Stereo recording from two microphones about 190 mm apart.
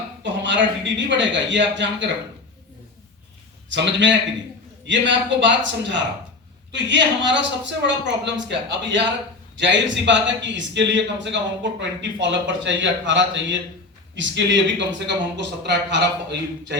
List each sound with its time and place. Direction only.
0.2 s a sound: 70° right (ahead or behind)
0.9 s a man's voice: 70° right (ahead or behind)
3.7 s a man's voice: 70° right (ahead or behind)